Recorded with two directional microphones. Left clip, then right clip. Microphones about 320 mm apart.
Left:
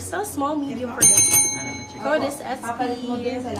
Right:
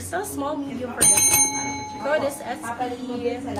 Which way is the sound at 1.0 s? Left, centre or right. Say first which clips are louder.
Left 1 dB; right.